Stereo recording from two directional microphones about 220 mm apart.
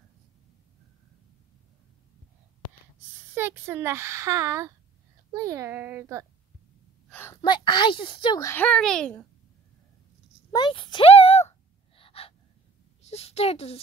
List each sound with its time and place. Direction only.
3.3 s a child's voice: 10° right (ahead or behind)
7.1 s a sound: 10° left (ahead or behind)
7.4 s a child's voice: 20° left (ahead or behind); by 9.2 s 5° left (ahead or behind)
10.5 s speech: 20° left (ahead or behind)
12.0 s gasp: 25° left (ahead or behind)
13.0 s a woman's voice: 30° left (ahead or behind)